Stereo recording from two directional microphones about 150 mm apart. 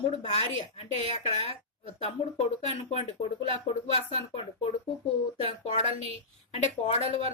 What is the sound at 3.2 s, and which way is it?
Speech, 45° left (ahead or behind).